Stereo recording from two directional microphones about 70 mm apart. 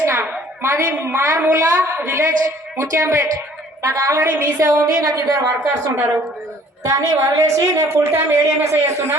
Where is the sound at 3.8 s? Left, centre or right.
Right.